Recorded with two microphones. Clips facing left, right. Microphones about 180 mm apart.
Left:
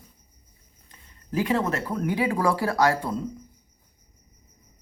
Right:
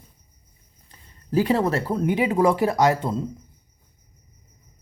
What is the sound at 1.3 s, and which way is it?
Speech, 35° right (ahead or behind).